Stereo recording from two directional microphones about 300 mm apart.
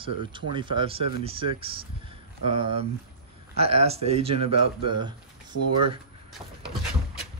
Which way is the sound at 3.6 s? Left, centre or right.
Centre.